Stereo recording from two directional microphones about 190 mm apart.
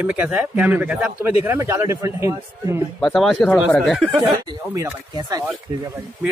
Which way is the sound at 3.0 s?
Centre (ahead or behind).